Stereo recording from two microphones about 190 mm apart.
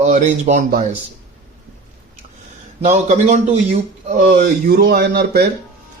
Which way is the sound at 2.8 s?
40° right (ahead or behind).